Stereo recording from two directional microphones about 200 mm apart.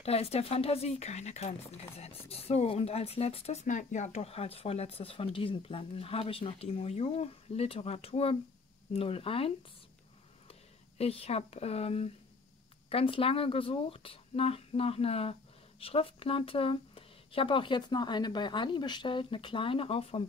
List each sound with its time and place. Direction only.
0.0 s speech: 30° left (ahead or behind)
10.5 s speech: 30° left (ahead or behind)